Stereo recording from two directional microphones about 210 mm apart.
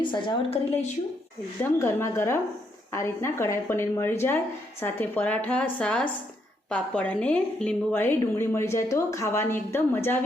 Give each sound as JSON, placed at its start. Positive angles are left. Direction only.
{"t": 0.0, "sound": "a woman's voice", "side_deg": 20}
{"t": 1.8, "sound": "a woman's voice", "side_deg": 10}